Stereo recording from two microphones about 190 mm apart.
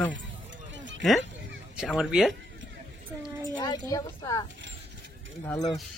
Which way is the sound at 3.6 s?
20° left (ahead or behind).